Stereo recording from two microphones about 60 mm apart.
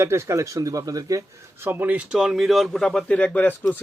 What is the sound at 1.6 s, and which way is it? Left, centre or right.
Speech, right.